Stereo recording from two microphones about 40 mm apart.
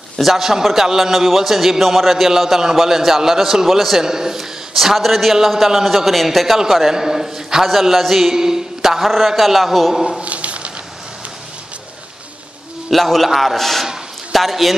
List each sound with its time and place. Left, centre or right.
0.2 s a man's voice: centre
9.0 s a man's voice: centre
10.2 s a sound: right
12.9 s a man's voice: centre